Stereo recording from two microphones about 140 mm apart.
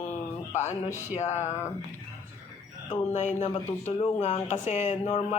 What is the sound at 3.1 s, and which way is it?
Speech, 55° left (ahead or behind).